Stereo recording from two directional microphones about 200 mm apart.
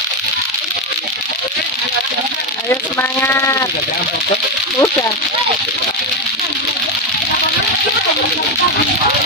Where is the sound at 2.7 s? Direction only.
10° left (ahead or behind).